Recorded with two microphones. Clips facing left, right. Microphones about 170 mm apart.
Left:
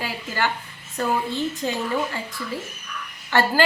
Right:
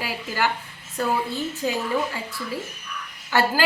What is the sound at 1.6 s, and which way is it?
Speech, 5° right (ahead or behind).